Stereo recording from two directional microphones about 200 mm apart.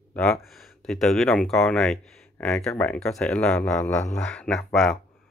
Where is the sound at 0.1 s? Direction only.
5° left (ahead or behind).